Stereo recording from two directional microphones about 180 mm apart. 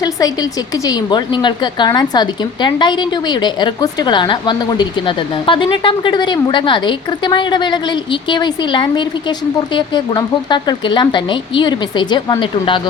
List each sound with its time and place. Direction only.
0.0 s a woman's voice: 20° left (ahead or behind)